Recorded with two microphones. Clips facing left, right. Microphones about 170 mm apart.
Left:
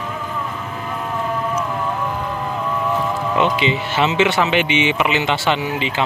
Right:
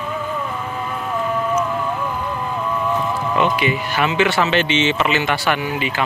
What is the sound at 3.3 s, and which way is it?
Speech, 20° left (ahead or behind).